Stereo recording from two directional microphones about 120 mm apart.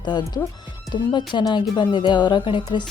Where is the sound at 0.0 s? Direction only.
35° left (ahead or behind).